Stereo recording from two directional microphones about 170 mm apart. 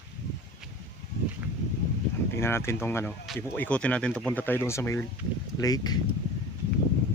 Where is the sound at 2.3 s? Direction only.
15° left (ahead or behind).